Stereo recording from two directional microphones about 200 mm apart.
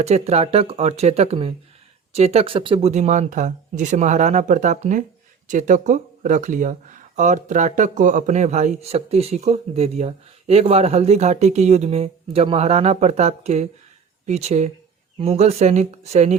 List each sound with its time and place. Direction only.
0.0 s speech: 30° right (ahead or behind)